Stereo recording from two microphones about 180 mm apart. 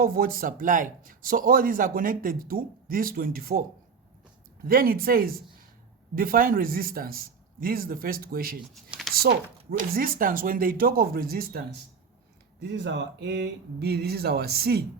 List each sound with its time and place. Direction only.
0.0 s a man's voice: 55° right (ahead or behind)
12.5 s speech: 75° right (ahead or behind)